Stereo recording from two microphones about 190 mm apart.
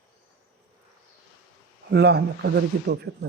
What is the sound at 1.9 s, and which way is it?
Speech, 60° right (ahead or behind).